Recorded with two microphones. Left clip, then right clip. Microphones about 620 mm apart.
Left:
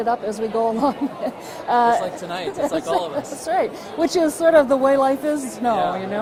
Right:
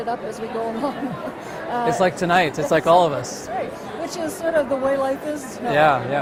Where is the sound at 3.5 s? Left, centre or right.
Left.